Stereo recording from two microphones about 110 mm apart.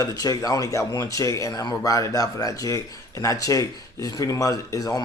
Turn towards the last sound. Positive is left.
turn(degrees=35)  # may be behind; listen again after turning